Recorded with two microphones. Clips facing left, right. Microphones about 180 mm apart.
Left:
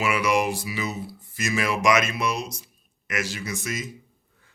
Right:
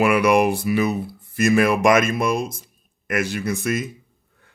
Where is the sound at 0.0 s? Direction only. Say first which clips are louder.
Right 7 dB; 55° right (ahead or behind).